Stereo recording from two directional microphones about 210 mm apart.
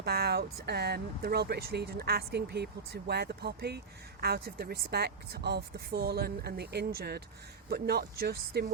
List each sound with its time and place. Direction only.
0.0 s speech: 50° right (ahead or behind)